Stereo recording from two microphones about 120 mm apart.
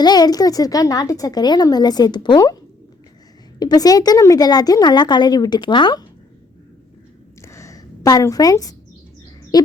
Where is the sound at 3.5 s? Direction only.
35° left (ahead or behind).